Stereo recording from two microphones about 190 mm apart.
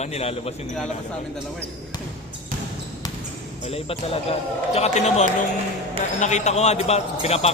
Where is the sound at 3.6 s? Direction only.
30° left (ahead or behind).